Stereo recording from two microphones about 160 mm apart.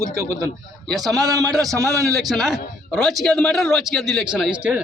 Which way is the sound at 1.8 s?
20° right (ahead or behind).